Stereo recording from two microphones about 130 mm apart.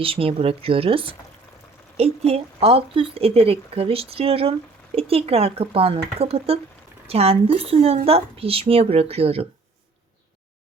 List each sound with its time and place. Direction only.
0.0 s speech: 45° right (ahead or behind)